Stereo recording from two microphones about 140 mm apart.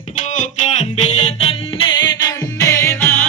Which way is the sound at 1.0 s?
50° left (ahead or behind).